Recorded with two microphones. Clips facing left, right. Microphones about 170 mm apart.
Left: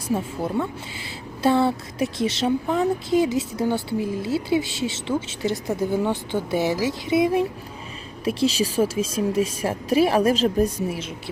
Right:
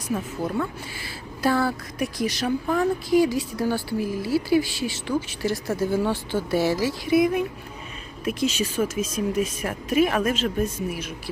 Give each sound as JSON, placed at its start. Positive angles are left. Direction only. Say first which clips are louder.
{"t": 0.1, "sound": "a woman's voice", "louder": "left 2 dB", "side_deg": 25}